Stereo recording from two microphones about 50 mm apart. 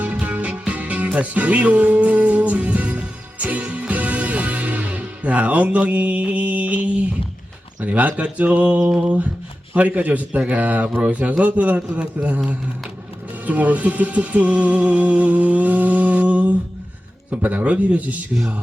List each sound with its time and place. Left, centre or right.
0.0 s music: right
7.8 s a man's voice: right
13.4 s speech: right